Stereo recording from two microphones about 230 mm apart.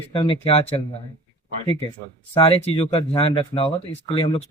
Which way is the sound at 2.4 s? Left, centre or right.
Left.